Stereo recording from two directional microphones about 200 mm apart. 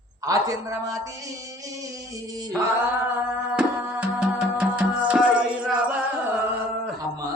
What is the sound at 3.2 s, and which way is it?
Music, 10° right (ahead or behind).